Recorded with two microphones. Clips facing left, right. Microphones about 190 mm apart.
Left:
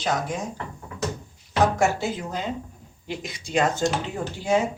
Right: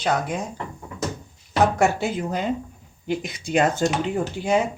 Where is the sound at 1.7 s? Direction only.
55° right (ahead or behind).